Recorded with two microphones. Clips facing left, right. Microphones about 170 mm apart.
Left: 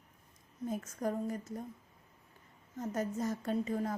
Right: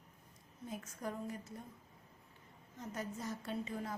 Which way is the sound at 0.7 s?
45° left (ahead or behind).